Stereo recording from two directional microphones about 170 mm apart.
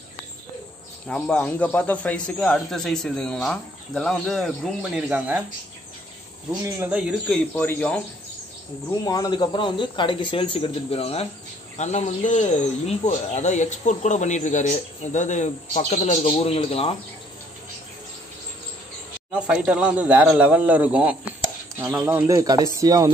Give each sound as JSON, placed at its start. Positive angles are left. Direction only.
{"t": 1.0, "sound": "a man's voice", "side_deg": 5}
{"t": 6.6, "sound": "a man's voice", "side_deg": -10}
{"t": 7.2, "sound": "speech", "side_deg": 5}
{"t": 9.0, "sound": "speech", "side_deg": 25}
{"t": 19.4, "sound": "a man's voice", "side_deg": -5}